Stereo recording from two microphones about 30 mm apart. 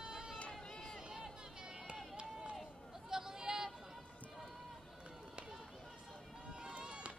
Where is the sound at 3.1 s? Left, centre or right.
Centre.